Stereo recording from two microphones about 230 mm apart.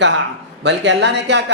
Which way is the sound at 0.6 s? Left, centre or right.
Right.